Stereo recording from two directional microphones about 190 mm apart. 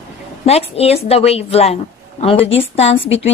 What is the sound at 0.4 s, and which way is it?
A woman's voice, 35° left (ahead or behind).